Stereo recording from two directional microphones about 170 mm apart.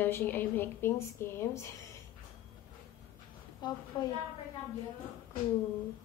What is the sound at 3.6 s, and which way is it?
Speech, 25° left (ahead or behind).